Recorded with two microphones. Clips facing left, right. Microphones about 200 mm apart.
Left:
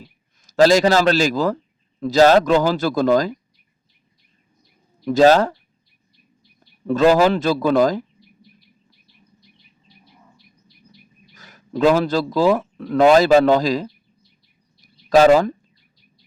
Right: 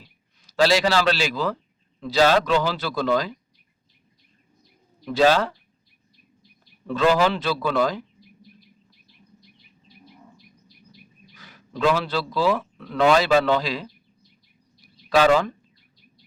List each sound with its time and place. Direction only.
0.4 s a man's voice: 45° left (ahead or behind)
5.0 s a man's voice: 45° left (ahead or behind)
6.8 s a man's voice: 45° left (ahead or behind)
11.3 s speech: 45° left (ahead or behind)
15.1 s a man's voice: 40° left (ahead or behind)